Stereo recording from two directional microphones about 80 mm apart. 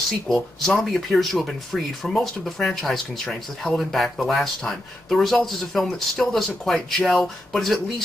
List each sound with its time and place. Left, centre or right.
0.3 s speech: centre